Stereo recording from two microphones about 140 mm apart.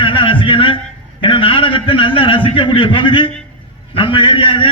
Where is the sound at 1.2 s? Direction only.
40° left (ahead or behind).